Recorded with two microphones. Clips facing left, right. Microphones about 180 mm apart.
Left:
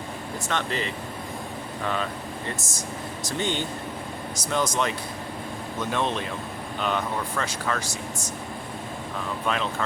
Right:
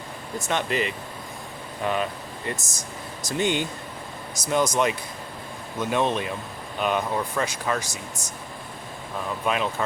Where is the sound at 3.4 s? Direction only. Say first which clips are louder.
Right 4 dB; 10° right (ahead or behind).